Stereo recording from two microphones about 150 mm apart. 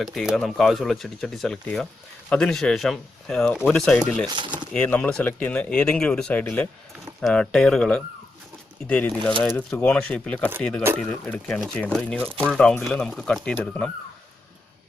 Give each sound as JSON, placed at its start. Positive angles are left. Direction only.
{"t": 0.0, "sound": "speech", "side_deg": 0}
{"t": 4.3, "sound": "speech", "side_deg": -30}
{"t": 4.7, "sound": "speech", "side_deg": 10}